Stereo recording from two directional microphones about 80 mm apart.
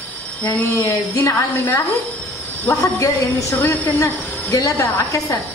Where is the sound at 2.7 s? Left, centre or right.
Left.